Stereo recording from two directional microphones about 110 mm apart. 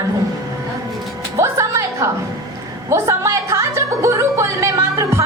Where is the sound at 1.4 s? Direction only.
25° right (ahead or behind).